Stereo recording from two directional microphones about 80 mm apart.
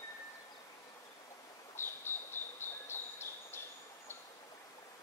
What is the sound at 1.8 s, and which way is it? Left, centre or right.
Bird, left.